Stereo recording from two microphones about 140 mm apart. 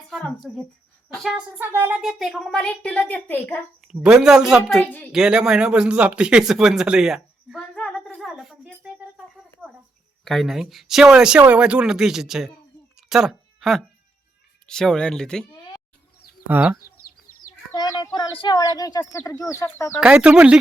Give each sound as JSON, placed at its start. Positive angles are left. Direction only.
{"t": 0.1, "sound": "speech", "side_deg": 0}
{"t": 1.5, "sound": "speech", "side_deg": -15}
{"t": 3.8, "sound": "speech", "side_deg": -5}
{"t": 7.8, "sound": "music", "side_deg": 0}
{"t": 10.2, "sound": "speech", "side_deg": 0}
{"t": 13.0, "sound": "a sound", "side_deg": -5}
{"t": 14.7, "sound": "speech", "side_deg": 5}
{"t": 16.5, "sound": "speech", "side_deg": -10}
{"t": 17.7, "sound": "chicken", "side_deg": 25}
{"t": 18.3, "sound": "speech", "side_deg": 30}
{"t": 20.0, "sound": "speech", "side_deg": -5}